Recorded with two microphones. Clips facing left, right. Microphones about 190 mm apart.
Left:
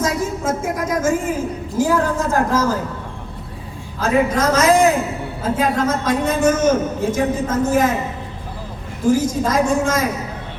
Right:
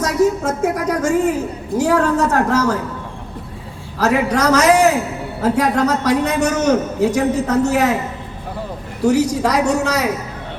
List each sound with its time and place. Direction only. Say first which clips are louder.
0.0 s a sound: right 5 dB; 70° right (ahead or behind)
1.8 s a man's voice: right 2 dB; 70° right (ahead or behind)
4.0 s a man's voice: right 1 dB; 75° right (ahead or behind)
9.0 s a man's voice: right 2 dB; 70° right (ahead or behind)